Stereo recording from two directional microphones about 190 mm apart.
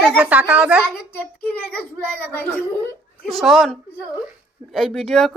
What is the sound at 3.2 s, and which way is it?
Speech, centre (ahead or behind).